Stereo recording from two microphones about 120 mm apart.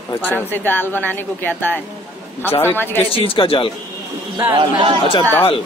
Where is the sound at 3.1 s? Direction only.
50° left (ahead or behind).